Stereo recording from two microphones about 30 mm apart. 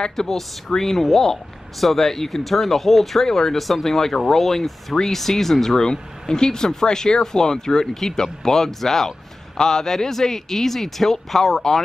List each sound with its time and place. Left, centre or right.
0.1 s speech: centre
5.9 s speech: left; by 11.8 s centre